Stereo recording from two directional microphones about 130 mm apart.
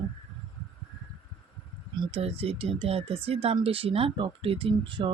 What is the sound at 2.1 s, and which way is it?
Speech, 50° right (ahead or behind).